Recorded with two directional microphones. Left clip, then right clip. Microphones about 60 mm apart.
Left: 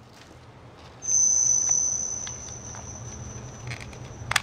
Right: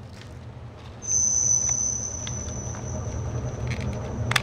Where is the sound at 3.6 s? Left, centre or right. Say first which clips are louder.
Right 4 dB; centre.